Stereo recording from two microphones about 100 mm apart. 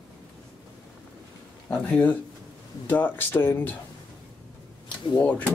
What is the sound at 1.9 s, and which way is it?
Speech, 15° left (ahead or behind).